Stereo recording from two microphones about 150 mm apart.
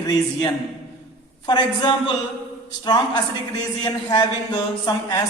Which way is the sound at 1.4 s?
30° left (ahead or behind).